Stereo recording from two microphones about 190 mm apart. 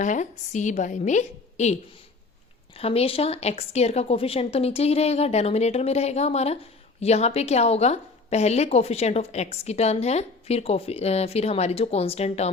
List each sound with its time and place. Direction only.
0.0 s a woman's voice: 40° left (ahead or behind)
2.7 s a woman's voice: 30° left (ahead or behind)